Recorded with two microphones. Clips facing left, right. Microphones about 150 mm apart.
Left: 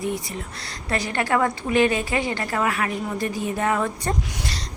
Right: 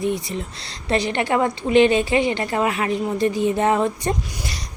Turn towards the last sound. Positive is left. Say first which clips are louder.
# right 2 dB
turn(degrees=-20)  # may be behind; listen again after turning